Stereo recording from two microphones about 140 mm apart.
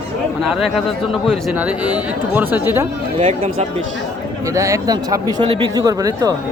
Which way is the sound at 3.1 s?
45° right (ahead or behind).